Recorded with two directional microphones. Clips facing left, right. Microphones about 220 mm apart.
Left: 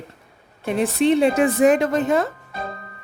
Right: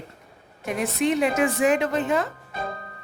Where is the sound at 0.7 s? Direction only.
30° left (ahead or behind).